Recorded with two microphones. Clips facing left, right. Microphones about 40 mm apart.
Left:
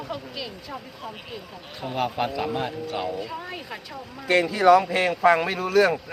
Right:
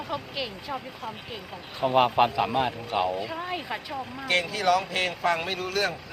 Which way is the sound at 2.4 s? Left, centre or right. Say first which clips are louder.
Right 1 dB; right.